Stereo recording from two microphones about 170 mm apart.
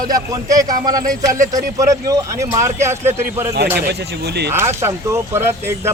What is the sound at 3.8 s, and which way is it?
Speech, 70° right (ahead or behind).